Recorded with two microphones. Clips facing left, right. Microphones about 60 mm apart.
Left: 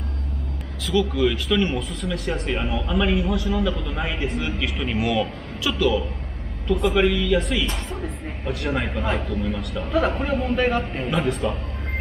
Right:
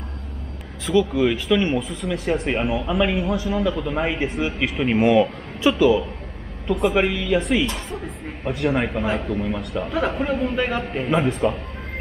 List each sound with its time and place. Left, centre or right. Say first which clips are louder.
0.8 s speech: right 2 dB; centre
3.7 s a man's voice: right 5 dB; right
8.7 s speech: right 3 dB; centre
9.0 s a man's voice: right 2 dB; centre
9.3 s speech: right 2 dB; centre
10.0 s a man's voice: right 1 dB; centre
11.1 s speech: right 5 dB; centre